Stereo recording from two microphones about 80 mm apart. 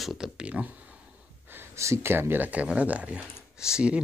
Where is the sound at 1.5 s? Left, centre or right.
Right.